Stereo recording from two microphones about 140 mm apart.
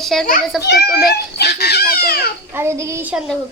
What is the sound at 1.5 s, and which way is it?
Fowl, 90° left.